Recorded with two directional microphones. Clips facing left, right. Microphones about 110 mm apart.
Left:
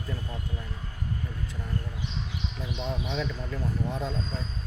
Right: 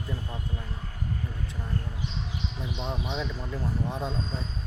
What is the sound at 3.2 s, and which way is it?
Speech, 20° right (ahead or behind).